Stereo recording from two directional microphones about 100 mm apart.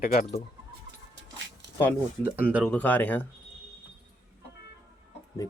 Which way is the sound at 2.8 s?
15° left (ahead or behind).